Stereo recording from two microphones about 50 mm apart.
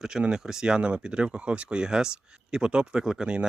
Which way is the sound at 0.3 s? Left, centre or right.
Centre.